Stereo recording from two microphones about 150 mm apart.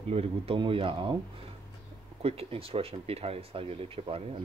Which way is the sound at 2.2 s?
40° right (ahead or behind).